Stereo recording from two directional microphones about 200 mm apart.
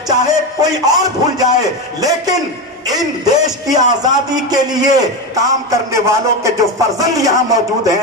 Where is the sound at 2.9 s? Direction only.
20° right (ahead or behind).